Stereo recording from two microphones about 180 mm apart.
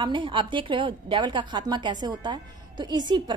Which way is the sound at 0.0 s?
25° right (ahead or behind).